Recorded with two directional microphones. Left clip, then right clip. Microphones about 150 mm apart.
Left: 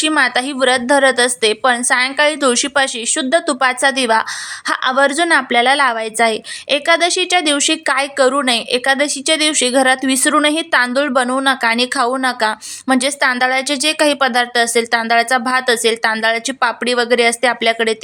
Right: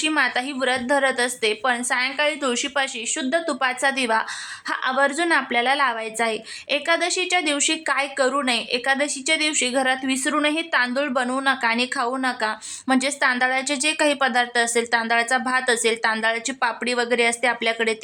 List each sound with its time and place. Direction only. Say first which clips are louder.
0.0 s a woman's voice: left 7 dB; 30° left (ahead or behind)